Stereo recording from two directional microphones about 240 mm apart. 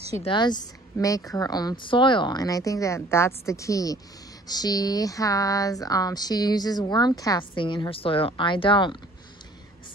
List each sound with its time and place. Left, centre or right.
0.2 s speech: centre